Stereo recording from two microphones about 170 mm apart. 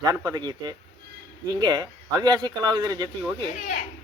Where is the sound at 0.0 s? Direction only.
20° right (ahead or behind).